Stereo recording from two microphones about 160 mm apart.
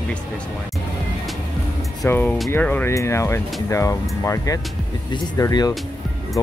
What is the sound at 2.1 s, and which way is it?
Speech, 10° left (ahead or behind).